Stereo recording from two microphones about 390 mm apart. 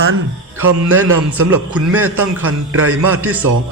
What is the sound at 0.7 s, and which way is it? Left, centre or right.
A man's voice, right.